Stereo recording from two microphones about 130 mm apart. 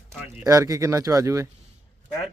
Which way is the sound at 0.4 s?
25° right (ahead or behind).